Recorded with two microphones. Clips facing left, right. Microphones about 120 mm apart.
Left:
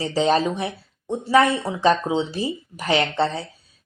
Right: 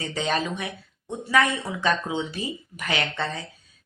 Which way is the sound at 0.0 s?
35° left (ahead or behind).